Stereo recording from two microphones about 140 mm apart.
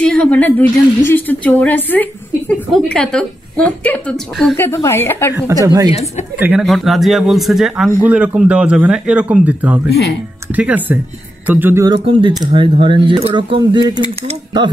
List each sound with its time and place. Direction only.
0.0 s a woman's voice: 10° left (ahead or behind)
4.6 s a woman's voice: 20° left (ahead or behind)
5.5 s speech: 25° right (ahead or behind)
6.4 s a man's voice: 5° right (ahead or behind)
11.8 s speech: 35° right (ahead or behind)